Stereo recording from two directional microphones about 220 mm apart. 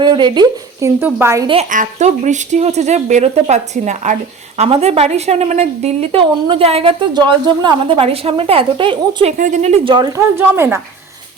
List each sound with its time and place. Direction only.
0.0 s a woman's voice: 20° right (ahead or behind)
1.5 s speech: 35° right (ahead or behind)
9.4 s speech: 35° right (ahead or behind); by 10.8 s 10° right (ahead or behind)